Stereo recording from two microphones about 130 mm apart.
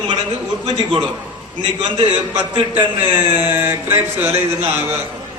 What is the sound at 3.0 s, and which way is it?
Speech, 15° right (ahead or behind).